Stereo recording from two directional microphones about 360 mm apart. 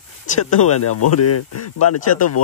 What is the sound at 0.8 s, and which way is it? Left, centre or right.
A man's voice, left.